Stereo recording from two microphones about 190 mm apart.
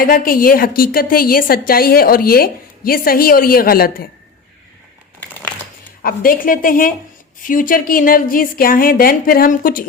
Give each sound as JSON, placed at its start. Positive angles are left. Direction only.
{"t": 0.0, "sound": "a woman's voice", "side_deg": 50}
{"t": 6.0, "sound": "a woman's voice", "side_deg": 50}